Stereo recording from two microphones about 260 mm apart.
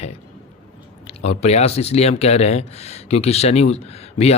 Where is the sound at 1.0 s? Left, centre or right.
Left.